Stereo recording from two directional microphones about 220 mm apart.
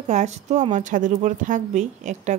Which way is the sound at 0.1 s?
30° right (ahead or behind).